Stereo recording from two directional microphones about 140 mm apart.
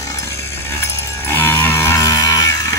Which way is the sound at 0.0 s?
20° left (ahead or behind).